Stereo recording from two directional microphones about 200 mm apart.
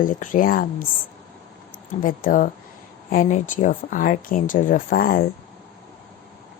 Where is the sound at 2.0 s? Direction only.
45° left (ahead or behind).